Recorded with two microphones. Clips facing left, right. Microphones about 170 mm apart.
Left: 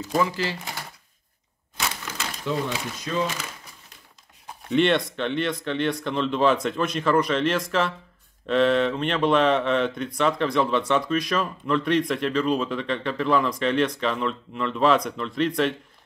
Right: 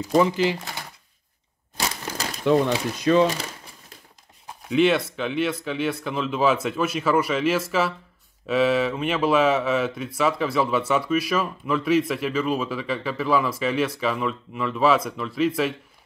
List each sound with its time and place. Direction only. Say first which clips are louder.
0.2 s speech: right 5 dB; 15° right (ahead or behind)
1.8 s crushing: right 2 dB; 35° right (ahead or behind)
2.4 s speech: right 8 dB; 65° right (ahead or behind)
4.6 s speech: right 1 dB; 5° right (ahead or behind)